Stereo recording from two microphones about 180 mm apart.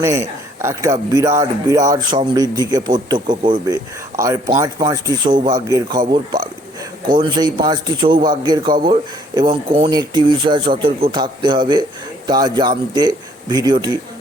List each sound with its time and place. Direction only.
0.0 s a man's voice: 15° right (ahead or behind)